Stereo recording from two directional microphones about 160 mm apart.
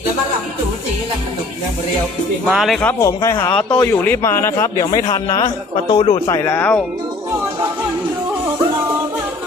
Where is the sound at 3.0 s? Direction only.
20° left (ahead or behind).